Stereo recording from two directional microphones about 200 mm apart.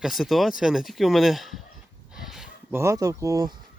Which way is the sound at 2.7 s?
15° right (ahead or behind).